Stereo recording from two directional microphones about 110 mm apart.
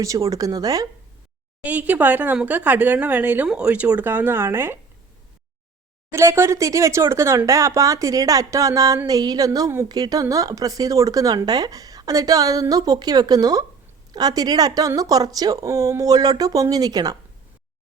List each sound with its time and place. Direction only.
0.0 s speech: 30° right (ahead or behind)
1.6 s speech: 15° right (ahead or behind)
6.1 s speech: 25° right (ahead or behind)